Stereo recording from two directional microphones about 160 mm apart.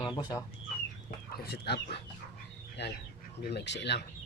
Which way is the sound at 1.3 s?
90° left.